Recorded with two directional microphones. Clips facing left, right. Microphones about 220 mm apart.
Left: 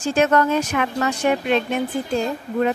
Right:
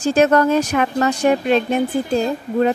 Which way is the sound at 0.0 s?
35° right (ahead or behind).